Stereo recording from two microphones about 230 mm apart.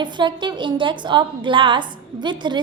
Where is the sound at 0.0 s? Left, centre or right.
Centre.